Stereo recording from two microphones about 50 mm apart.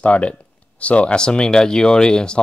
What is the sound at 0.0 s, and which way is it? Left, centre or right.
Speech, left.